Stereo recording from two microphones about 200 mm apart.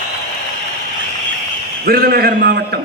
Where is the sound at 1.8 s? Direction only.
50° right (ahead or behind).